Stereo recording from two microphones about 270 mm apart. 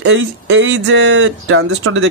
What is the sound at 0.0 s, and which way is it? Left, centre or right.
Speech, right.